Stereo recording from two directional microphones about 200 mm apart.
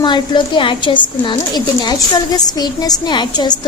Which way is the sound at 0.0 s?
25° left (ahead or behind).